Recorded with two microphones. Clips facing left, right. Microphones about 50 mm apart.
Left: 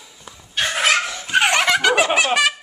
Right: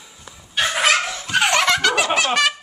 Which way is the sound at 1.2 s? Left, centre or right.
Centre.